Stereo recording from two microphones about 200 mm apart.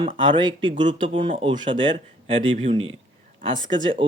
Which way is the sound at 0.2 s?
25° right (ahead or behind).